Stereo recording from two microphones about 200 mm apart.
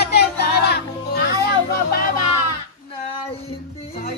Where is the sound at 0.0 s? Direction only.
50° left (ahead or behind).